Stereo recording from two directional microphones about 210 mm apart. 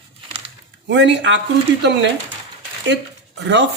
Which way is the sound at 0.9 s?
55° right (ahead or behind).